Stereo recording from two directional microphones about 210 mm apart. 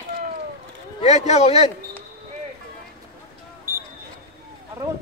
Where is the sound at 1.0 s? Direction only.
30° left (ahead or behind).